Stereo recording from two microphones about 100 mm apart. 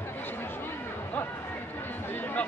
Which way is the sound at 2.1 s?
20° left (ahead or behind).